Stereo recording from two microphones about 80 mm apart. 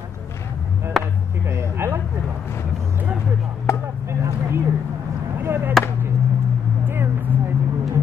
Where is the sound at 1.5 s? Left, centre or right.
Right.